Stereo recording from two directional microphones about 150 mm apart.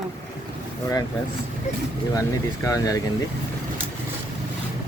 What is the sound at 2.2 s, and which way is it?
Speech, 20° left (ahead or behind).